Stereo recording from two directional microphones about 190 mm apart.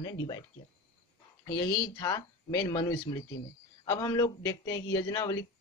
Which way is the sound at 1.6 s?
25° left (ahead or behind).